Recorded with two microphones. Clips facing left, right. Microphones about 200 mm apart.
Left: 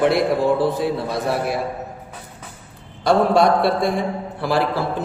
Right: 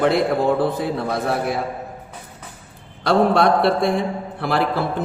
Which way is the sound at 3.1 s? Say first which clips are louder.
Even; 60° right (ahead or behind).